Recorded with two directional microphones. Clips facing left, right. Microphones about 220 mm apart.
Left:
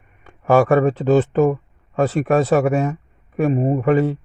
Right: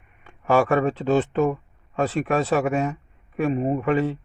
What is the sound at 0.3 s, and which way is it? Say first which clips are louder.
Speech: left 5 dB; 40° left (ahead or behind).